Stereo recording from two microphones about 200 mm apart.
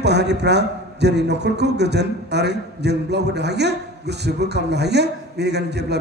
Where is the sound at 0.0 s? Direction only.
55° right (ahead or behind).